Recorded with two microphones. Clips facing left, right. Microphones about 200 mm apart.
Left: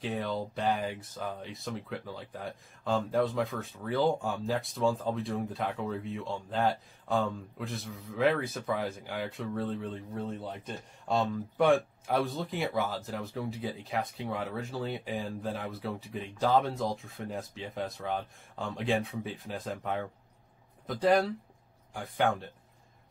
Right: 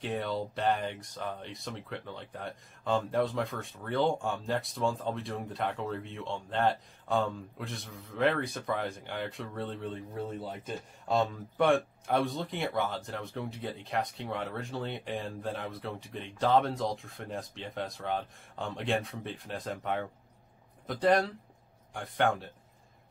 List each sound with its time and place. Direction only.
0.0 s speech: centre (ahead or behind)